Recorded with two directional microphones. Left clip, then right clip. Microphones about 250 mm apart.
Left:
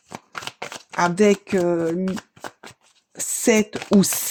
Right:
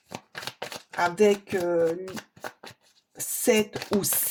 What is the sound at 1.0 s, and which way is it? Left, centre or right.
Speech, left.